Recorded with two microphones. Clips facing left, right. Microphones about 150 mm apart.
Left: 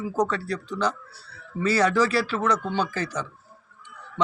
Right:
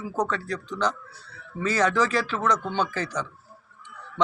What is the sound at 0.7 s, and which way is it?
Speech, 10° left (ahead or behind).